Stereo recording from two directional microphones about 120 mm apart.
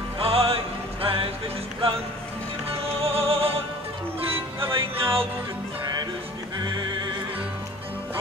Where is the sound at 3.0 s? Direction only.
55° right (ahead or behind).